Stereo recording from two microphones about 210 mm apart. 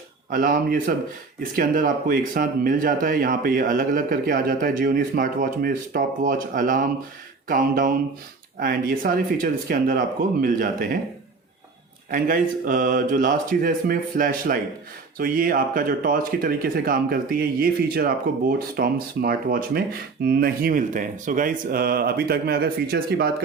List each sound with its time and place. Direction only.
0.3 s speech: 40° right (ahead or behind)
12.1 s speech: 40° right (ahead or behind)